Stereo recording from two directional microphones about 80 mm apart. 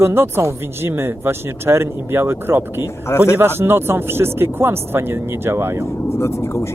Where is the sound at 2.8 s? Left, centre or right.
Left.